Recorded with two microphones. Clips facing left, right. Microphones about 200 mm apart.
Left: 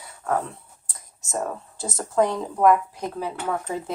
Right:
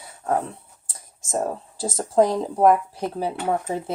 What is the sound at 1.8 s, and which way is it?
Speech, 35° right (ahead or behind).